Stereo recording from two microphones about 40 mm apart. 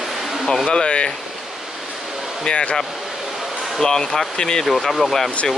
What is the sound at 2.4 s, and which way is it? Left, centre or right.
Speech, left.